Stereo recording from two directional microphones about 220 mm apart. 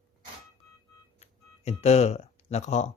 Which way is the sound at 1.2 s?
30° left (ahead or behind).